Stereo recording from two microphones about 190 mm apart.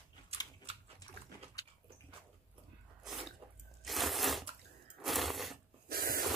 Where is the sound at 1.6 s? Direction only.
20° left (ahead or behind).